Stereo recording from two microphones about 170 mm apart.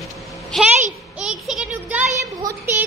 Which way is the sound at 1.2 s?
5° right (ahead or behind).